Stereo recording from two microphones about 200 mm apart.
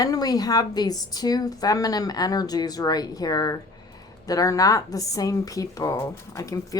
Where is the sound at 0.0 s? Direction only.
20° left (ahead or behind).